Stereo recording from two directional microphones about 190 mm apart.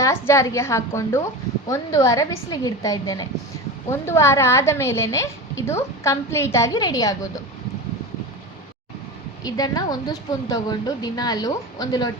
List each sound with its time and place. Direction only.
0.0 s a woman's voice: 15° left (ahead or behind)
9.4 s a woman's voice: 20° left (ahead or behind)